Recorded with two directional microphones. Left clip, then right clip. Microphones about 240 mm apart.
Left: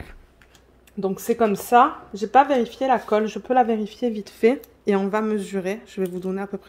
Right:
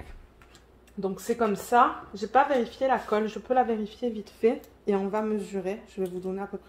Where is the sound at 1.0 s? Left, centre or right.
Left.